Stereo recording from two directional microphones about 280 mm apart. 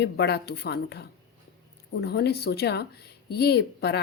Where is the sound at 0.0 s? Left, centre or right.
Left.